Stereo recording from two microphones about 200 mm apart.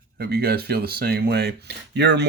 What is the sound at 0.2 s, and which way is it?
Speech, 55° right (ahead or behind).